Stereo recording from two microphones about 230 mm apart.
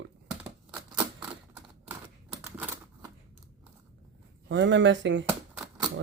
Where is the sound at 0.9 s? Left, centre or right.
Centre.